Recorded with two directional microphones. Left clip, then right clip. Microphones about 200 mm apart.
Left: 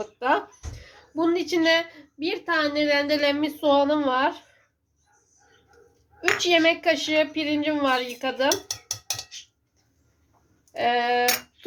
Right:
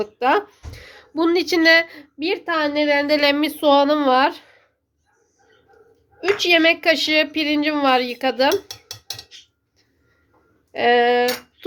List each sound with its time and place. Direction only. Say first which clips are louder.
0.0 s speech: right 5 dB; 50° right (ahead or behind)
6.3 s speech: right 5 dB; 50° right (ahead or behind)
10.7 s speech: right 7 dB; 55° right (ahead or behind)